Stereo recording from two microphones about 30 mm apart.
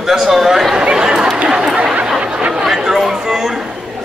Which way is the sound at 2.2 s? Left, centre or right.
Right.